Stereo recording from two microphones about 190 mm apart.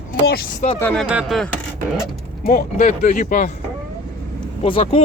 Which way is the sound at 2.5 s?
40° left (ahead or behind).